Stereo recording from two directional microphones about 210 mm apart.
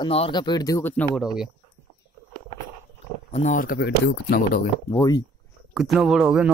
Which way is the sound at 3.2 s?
30° left (ahead or behind).